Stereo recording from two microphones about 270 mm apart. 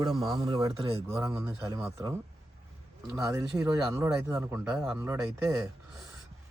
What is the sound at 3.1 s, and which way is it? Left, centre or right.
Speech, centre.